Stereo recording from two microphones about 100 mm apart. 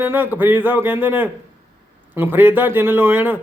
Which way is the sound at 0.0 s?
20° right (ahead or behind).